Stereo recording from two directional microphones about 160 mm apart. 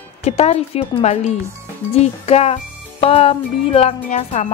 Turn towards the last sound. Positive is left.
turn(degrees=40)  # may be behind; listen again after turning